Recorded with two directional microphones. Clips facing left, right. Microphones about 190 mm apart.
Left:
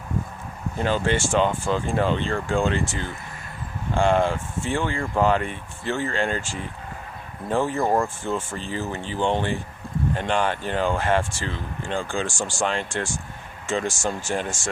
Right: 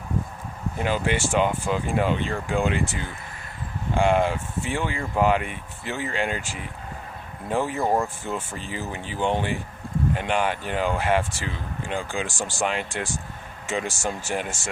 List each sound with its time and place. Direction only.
0.8 s speech: 10° right (ahead or behind)
3.9 s speech: 10° right (ahead or behind)